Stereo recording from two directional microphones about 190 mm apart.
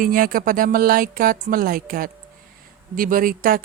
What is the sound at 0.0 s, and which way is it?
A woman's voice, 50° right (ahead or behind).